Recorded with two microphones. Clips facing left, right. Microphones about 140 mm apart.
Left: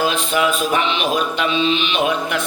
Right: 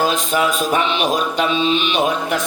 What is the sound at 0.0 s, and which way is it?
Mantra, 40° right (ahead or behind).